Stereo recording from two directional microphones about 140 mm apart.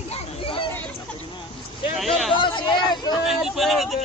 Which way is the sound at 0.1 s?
40° left (ahead or behind).